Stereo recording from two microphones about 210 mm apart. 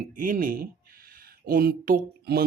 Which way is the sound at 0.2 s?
40° right (ahead or behind).